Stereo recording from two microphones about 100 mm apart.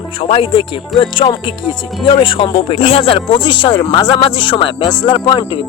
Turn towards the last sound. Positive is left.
turn(degrees=50)  # may be behind; listen again after turning